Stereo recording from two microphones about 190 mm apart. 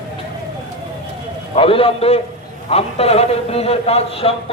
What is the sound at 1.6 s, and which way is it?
A man's voice, 30° left (ahead or behind).